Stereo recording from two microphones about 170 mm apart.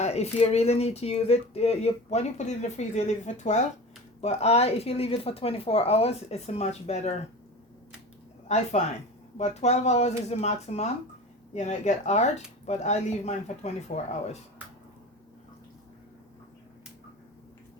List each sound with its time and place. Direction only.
0.0 s speech: 40° left (ahead or behind)
8.4 s speech: 40° left (ahead or behind)